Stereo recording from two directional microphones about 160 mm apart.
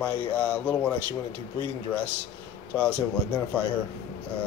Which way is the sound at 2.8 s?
10° left (ahead or behind).